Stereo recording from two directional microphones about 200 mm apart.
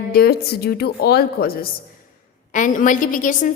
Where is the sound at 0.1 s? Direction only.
50° left (ahead or behind).